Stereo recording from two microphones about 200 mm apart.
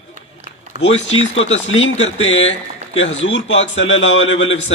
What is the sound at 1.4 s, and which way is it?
Speech, 70° left (ahead or behind).